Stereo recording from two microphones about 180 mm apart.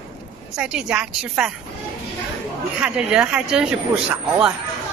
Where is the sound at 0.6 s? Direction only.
5° right (ahead or behind).